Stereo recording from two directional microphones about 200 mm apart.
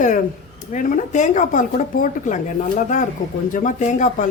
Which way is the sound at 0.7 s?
40° left (ahead or behind).